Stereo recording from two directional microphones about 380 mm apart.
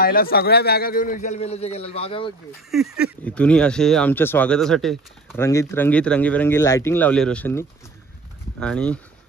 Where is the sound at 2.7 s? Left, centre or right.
Centre.